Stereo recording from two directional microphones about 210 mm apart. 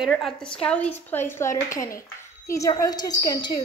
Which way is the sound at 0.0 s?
Centre (ahead or behind).